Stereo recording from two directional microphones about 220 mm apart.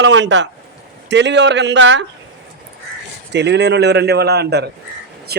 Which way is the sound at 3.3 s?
50° right (ahead or behind).